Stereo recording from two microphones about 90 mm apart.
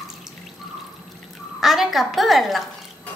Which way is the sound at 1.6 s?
Centre (ahead or behind).